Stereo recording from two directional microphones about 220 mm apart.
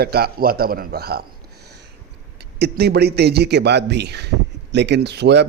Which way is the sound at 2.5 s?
50° right (ahead or behind).